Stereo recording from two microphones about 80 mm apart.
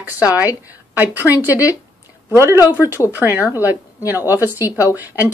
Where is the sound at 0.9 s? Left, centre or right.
Right.